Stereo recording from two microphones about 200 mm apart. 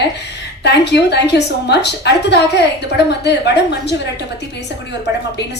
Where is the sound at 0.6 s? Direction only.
55° left (ahead or behind).